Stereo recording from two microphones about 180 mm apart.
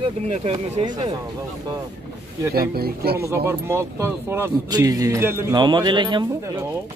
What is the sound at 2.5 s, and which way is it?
Speech, 55° right (ahead or behind).